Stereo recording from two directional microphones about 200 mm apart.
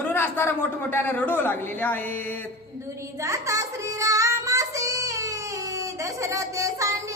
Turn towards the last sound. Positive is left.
turn(degrees=-15)  # may be behind; listen again after turning